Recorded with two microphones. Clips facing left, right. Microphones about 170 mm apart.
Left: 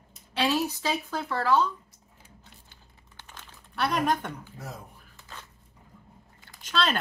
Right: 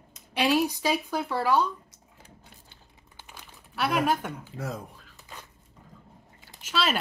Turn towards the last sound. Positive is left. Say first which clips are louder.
# even
turn(degrees=-5)  # may be behind; listen again after turning